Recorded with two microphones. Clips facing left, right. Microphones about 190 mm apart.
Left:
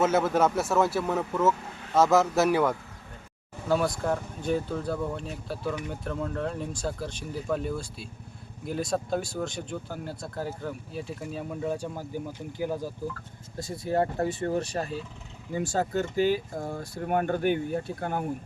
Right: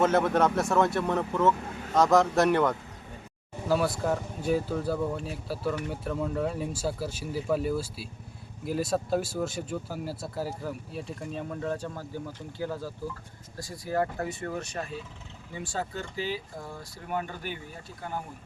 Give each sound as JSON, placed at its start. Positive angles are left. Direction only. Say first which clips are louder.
{"t": 0.0, "sound": "speech", "louder": "even", "side_deg": 5}